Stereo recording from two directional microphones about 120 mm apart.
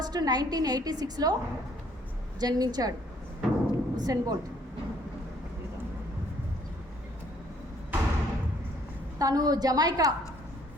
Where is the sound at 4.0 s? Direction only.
30° right (ahead or behind).